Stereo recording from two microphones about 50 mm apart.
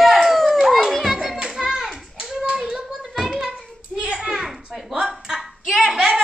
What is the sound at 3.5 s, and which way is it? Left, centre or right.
Hands, centre.